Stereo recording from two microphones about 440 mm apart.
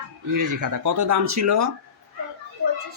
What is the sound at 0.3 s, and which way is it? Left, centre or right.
Speech, right.